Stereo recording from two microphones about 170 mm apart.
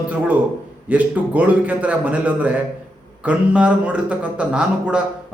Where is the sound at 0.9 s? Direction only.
10° right (ahead or behind).